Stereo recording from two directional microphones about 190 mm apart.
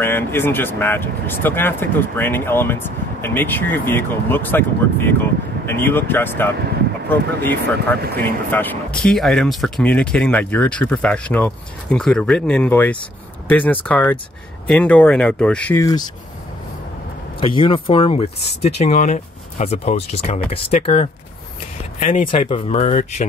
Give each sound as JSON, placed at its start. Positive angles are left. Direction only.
{"t": 0.0, "sound": "speech", "side_deg": 10}
{"t": 17.4, "sound": "speech", "side_deg": 25}